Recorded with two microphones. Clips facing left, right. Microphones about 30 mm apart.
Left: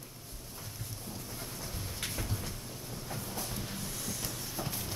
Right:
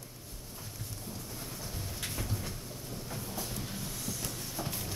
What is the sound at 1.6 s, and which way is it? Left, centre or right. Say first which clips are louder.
Rain: left 1 dB; centre.